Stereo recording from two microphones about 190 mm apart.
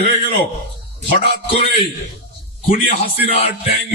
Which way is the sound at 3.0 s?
30° left (ahead or behind).